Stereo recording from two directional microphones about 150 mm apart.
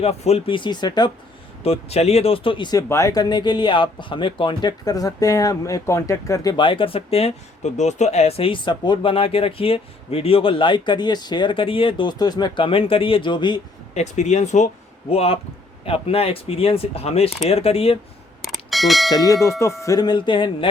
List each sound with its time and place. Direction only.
0.0 s speech: 45° left (ahead or behind); by 1.1 s 30° left (ahead or behind)
1.6 s speech: 45° left (ahead or behind)
13.9 s speech: 50° left (ahead or behind)
15.1 s speech: 40° left (ahead or behind)
18.4 s a sound: centre (ahead or behind)
19.1 s church bell: 25° left (ahead or behind)
19.8 s speech: 25° left (ahead or behind)